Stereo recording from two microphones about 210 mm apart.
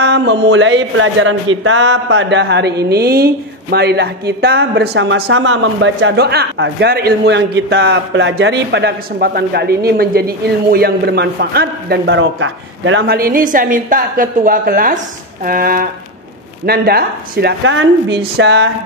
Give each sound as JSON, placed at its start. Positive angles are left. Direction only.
{"t": 0.0, "sound": "a woman's voice", "side_deg": -55}